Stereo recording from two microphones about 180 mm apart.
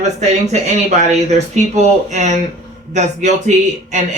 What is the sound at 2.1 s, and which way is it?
Speech, 40° right (ahead or behind).